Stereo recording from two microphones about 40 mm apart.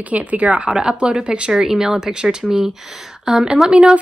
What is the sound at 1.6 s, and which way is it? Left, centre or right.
Speech, centre.